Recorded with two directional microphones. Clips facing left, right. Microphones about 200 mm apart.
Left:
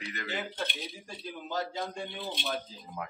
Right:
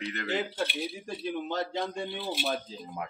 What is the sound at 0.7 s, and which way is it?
Speech, centre (ahead or behind).